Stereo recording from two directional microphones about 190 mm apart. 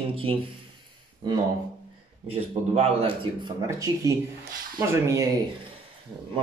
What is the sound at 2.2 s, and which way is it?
Speech, 30° right (ahead or behind).